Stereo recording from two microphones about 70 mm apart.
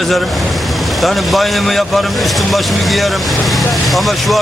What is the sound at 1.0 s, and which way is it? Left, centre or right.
Speech, centre.